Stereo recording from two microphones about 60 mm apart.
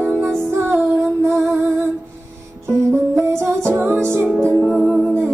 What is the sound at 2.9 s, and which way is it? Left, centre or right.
Music, right.